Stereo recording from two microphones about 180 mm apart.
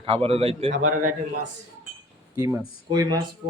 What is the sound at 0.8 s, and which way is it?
Speech, 45° right (ahead or behind).